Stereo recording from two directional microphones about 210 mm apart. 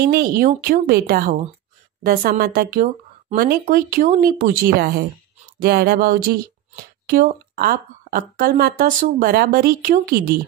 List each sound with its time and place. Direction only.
0.0 s speech: 45° right (ahead or behind)